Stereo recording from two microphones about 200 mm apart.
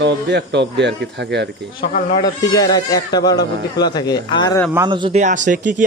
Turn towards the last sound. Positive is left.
turn(degrees=-40)  # may be behind; listen again after turning